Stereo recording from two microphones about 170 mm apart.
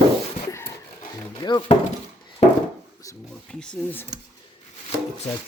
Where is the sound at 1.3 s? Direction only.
25° left (ahead or behind).